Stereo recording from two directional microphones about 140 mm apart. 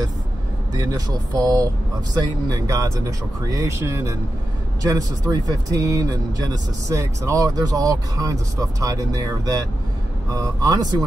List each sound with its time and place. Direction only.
0.7 s speech: 25° right (ahead or behind)